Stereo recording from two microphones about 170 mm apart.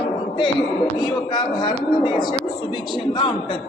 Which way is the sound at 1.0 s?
25° left (ahead or behind).